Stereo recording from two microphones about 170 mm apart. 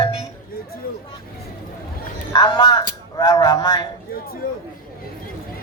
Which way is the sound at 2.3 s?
25° left (ahead or behind).